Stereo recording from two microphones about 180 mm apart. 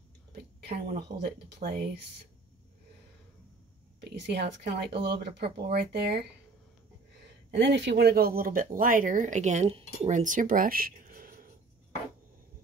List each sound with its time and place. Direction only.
0.3 s a sound: 60° right (ahead or behind)
1.2 s speech: 60° right (ahead or behind)
4.0 s speech: 65° right (ahead or behind)
7.5 s speech: 75° right (ahead or behind); by 11.5 s 55° right (ahead or behind)